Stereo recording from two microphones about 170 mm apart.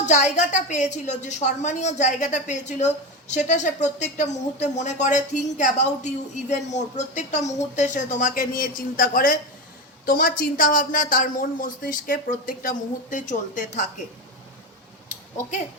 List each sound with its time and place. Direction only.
0.0 s a woman's voice: 45° left (ahead or behind)